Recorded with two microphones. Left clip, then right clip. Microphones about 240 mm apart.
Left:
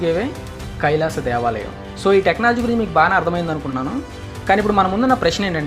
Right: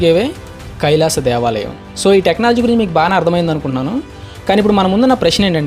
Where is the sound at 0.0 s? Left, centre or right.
Right.